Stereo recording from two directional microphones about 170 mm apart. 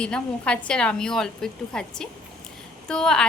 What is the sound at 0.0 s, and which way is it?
A woman's voice, 5° left (ahead or behind).